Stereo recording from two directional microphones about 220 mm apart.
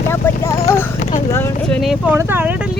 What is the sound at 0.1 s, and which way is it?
Clip-clop, 10° left (ahead or behind).